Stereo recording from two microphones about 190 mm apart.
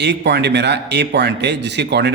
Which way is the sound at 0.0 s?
60° right (ahead or behind).